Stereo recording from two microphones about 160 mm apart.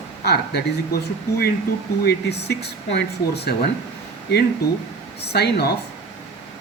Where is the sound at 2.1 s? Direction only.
90° left.